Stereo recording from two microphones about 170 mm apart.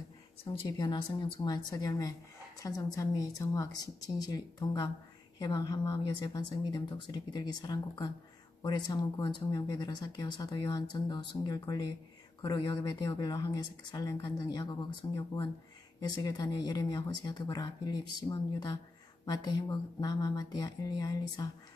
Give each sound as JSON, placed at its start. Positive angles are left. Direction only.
{"t": 0.5, "sound": "speech", "side_deg": 30}